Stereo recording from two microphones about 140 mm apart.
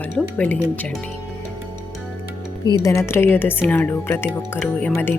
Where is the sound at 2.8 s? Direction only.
20° left (ahead or behind).